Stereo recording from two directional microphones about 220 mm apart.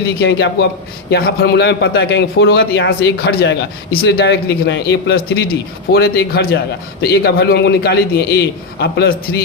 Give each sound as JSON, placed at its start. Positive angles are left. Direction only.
{"t": 0.2, "sound": "a man's voice", "side_deg": 55}